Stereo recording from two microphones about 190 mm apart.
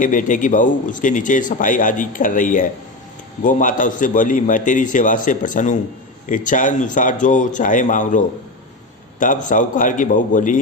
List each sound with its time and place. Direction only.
0.0 s a man's voice: 45° left (ahead or behind)